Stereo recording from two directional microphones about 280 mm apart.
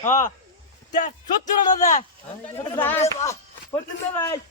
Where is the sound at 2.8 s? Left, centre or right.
Centre.